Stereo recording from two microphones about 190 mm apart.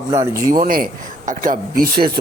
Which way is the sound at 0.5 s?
50° right (ahead or behind).